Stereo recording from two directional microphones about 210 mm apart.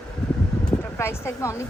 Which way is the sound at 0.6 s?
10° left (ahead or behind).